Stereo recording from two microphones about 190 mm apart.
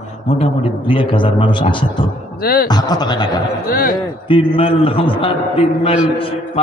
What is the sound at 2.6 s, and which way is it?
Speech, 20° left (ahead or behind).